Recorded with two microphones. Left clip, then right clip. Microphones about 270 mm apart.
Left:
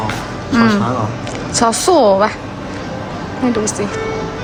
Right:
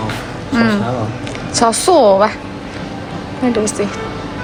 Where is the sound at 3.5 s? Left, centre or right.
Centre.